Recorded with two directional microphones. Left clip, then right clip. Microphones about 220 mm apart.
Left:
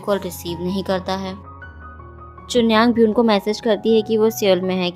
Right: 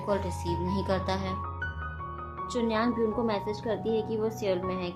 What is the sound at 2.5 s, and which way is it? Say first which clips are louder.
A woman's voice: left 13 dB; 45° left (ahead or behind).